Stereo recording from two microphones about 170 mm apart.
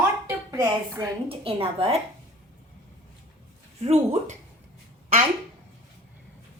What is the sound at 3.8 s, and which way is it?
Speech, 40° right (ahead or behind).